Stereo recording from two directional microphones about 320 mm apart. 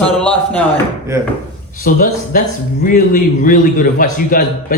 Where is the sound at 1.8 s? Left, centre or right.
Left.